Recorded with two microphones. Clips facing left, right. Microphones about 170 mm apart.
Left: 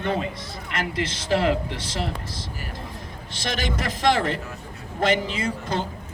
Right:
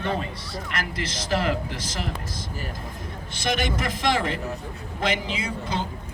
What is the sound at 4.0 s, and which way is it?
A man's voice, 50° left (ahead or behind).